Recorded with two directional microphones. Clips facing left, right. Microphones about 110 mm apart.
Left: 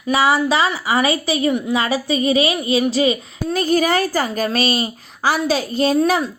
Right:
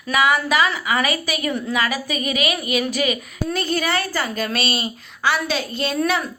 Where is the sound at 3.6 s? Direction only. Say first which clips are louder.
Left 7 dB; 40° left (ahead or behind).